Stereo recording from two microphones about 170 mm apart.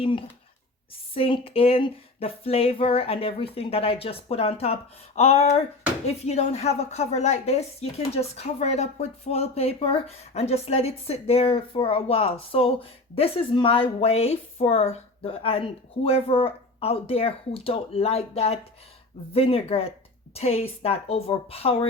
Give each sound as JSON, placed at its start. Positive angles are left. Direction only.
{"t": 0.0, "sound": "a woman's voice", "side_deg": 30}